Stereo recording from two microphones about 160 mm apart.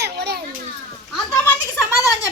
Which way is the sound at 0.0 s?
90° right.